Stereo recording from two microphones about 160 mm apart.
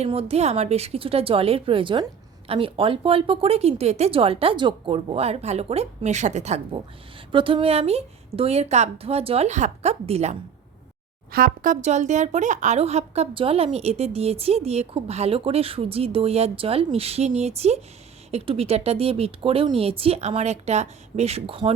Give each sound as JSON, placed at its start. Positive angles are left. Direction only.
{"t": 0.0, "sound": "speech", "side_deg": -40}
{"t": 7.3, "sound": "speech", "side_deg": -30}
{"t": 11.3, "sound": "speech", "side_deg": -65}